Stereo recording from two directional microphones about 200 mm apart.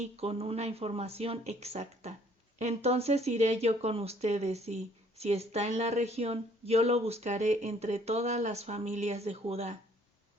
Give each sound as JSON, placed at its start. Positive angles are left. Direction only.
{"t": 0.0, "sound": "speech", "side_deg": -30}